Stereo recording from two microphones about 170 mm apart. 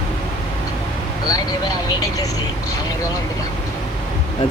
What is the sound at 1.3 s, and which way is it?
Speech, 20° left (ahead or behind).